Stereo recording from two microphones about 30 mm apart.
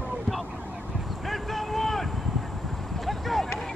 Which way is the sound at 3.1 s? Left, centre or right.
Centre.